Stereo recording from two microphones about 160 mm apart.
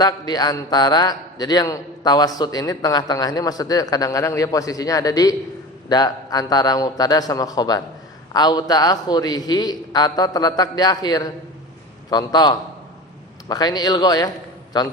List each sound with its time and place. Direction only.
0.0 s a man's voice: 25° left (ahead or behind)